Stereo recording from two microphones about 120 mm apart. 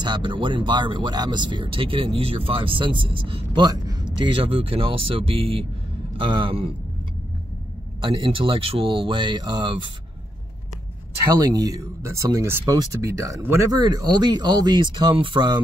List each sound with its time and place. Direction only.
0.0 s speech: 40° right (ahead or behind)
3.6 s speech: 35° right (ahead or behind)
8.0 s speech: 45° right (ahead or behind)
11.4 s speech: 35° right (ahead or behind)